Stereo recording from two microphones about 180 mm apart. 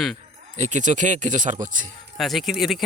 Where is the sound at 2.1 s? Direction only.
Centre (ahead or behind).